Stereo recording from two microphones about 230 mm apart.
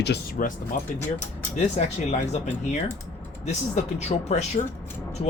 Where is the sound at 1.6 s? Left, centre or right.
Left.